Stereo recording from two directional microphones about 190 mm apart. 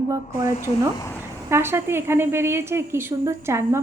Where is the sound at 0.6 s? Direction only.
15° left (ahead or behind).